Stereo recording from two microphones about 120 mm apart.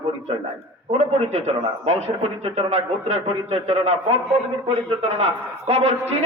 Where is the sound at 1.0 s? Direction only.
65° right (ahead or behind).